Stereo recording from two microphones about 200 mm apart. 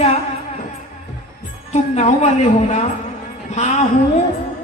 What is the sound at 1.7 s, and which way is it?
Speech, 35° left (ahead or behind).